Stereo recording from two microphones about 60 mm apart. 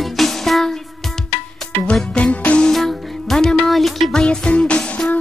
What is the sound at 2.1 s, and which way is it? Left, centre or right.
Music, left.